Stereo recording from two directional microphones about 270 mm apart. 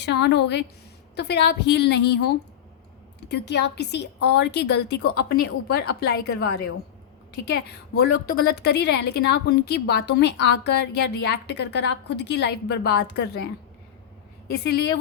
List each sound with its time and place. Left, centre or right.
0.0 s a woman's voice: left